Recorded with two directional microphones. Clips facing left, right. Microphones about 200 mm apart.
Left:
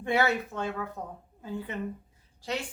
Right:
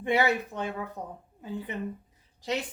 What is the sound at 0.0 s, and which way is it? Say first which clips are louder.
Speech: right 1 dB; 15° right (ahead or behind).